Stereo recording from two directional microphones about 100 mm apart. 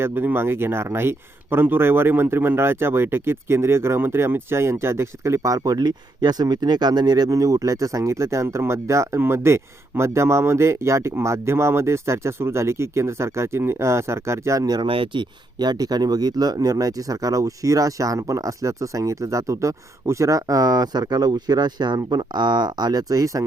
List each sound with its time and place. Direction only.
0.0 s speech: 20° right (ahead or behind)
14.8 s speech: 60° right (ahead or behind); by 23.4 s 35° right (ahead or behind)